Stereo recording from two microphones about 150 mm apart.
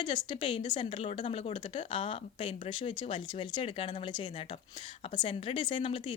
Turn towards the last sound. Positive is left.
turn(degrees=35)  # may be behind; listen again after turning